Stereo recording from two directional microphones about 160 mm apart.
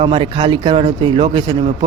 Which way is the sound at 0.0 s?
30° right (ahead or behind).